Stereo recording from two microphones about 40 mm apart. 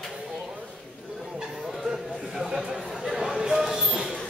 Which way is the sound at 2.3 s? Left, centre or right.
Centre.